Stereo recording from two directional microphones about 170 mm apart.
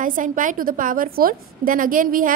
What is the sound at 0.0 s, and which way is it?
A woman's voice, 50° right (ahead or behind).